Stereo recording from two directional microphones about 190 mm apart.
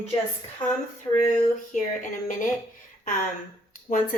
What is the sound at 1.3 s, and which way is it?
Speech, 40° left (ahead or behind).